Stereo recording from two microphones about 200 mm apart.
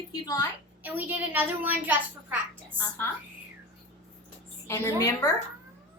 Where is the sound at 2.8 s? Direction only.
10° left (ahead or behind).